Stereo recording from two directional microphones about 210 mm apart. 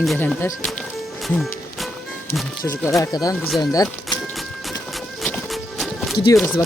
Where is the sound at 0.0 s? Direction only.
Centre (ahead or behind).